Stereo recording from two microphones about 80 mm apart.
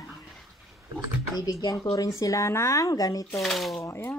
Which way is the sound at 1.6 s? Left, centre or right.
Left.